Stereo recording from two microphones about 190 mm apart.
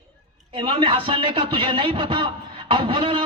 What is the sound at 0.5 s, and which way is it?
A man's voice, 25° right (ahead or behind).